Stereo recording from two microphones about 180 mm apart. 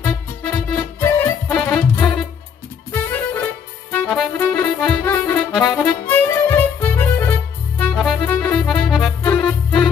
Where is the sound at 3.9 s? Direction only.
10° left (ahead or behind).